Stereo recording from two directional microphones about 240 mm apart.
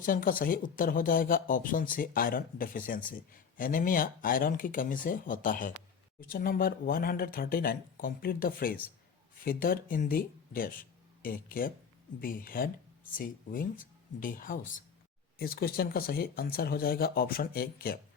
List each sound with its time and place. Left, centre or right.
0.0 s speech: left